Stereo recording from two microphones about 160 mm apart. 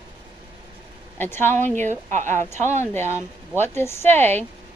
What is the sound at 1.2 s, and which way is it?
Speech, 15° left (ahead or behind).